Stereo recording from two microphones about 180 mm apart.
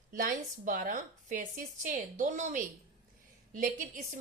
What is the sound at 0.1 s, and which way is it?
A woman's voice, 45° right (ahead or behind).